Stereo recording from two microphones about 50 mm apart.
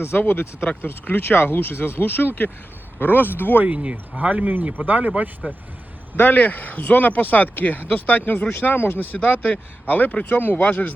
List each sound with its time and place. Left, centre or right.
0.2 s speech: left
4.2 s speech: right
6.1 s speech: left
9.2 s speech: left